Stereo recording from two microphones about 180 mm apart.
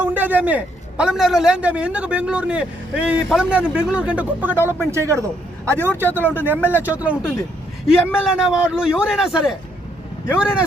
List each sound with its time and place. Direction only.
0.0 s a man's voice: 10° right (ahead or behind)
4.5 s speech: 15° left (ahead or behind)
4.9 s a man's voice: 15° right (ahead or behind)